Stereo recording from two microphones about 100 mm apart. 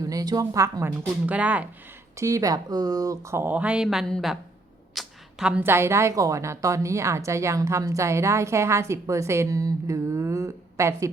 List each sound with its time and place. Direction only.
0.0 s speech: 35° right (ahead or behind)
1.3 s speech: 15° right (ahead or behind)
2.1 s speech: 30° right (ahead or behind)
3.5 s speech: 15° right (ahead or behind)
3.8 s speech: 5° left (ahead or behind)
4.9 s a sound: 5° right (ahead or behind)
5.6 s a woman's voice: 25° right (ahead or behind)